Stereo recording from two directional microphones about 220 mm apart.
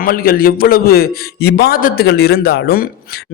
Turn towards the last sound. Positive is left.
turn(degrees=45)  # may be behind; listen again after turning